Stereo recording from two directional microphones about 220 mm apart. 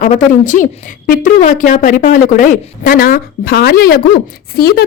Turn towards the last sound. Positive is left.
turn(degrees=45)  # may be behind; listen again after turning